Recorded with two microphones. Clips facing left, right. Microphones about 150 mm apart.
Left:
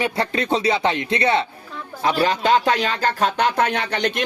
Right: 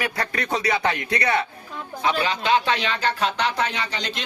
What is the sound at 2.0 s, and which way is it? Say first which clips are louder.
Speech: left 4 dB; 40° left (ahead or behind).